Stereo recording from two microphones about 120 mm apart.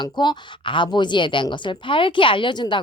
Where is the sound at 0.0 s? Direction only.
40° left (ahead or behind).